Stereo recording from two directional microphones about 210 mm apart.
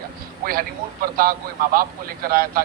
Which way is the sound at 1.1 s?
45° right (ahead or behind).